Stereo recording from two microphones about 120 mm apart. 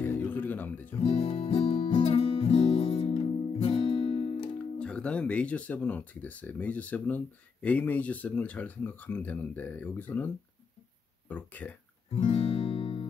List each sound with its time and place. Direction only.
0.0 s music: 15° left (ahead or behind)
1.0 s music: 50° left (ahead or behind)
3.6 s guitar: 50° left (ahead or behind)
4.7 s speech: 10° left (ahead or behind)
12.2 s music: 55° left (ahead or behind)